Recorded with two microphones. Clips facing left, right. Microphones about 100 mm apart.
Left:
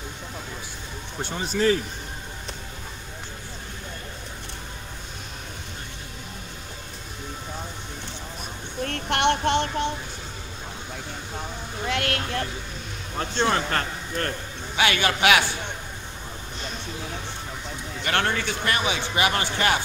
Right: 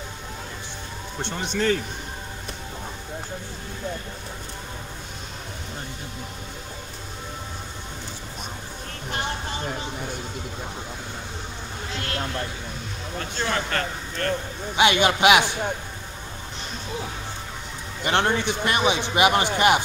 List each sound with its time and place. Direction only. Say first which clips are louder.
1.2 s speech: left 2 dB; 5° left (ahead or behind)
8.8 s child singing: left 8 dB; 70° left (ahead or behind)
11.9 s speech: left 6 dB; 65° left (ahead or behind)
13.2 s speech: left 4 dB; 35° left (ahead or behind)
14.8 s speech: right 3 dB; 20° right (ahead or behind)
18.0 s speech: right 3 dB; 20° right (ahead or behind)